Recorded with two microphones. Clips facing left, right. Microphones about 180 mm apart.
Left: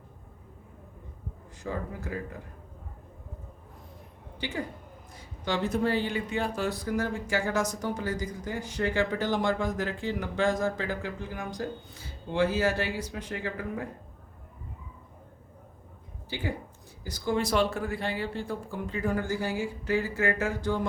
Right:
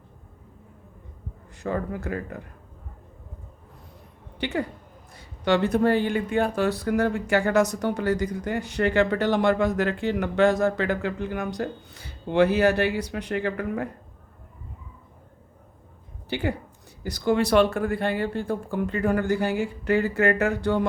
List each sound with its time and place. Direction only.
1.6 s speech: 65° right (ahead or behind)
4.4 s a woman's voice: 65° right (ahead or behind)
16.3 s speech: 70° right (ahead or behind)